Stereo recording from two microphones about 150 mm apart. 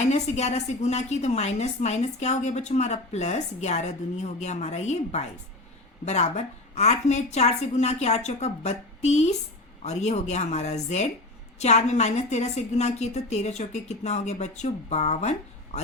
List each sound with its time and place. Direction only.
0.1 s a woman's voice: 45° left (ahead or behind)